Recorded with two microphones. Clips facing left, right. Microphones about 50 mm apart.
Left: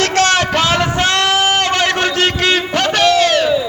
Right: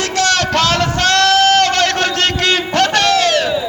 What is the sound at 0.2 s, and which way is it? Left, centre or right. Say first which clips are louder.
Vehicle: left 1 dB; left.